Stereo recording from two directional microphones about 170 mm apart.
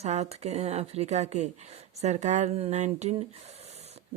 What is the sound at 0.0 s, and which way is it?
Speech, 40° right (ahead or behind).